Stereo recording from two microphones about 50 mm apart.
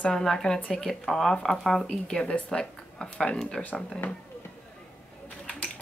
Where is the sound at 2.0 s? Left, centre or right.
Centre.